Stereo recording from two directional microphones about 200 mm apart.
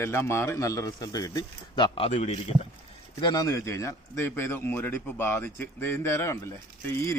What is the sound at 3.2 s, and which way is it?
A man's voice, 20° left (ahead or behind).